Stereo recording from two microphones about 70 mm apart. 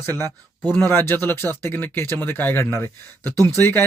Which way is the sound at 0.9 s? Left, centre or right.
Left.